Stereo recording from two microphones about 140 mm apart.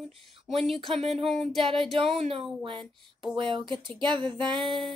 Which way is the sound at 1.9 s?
40° right (ahead or behind).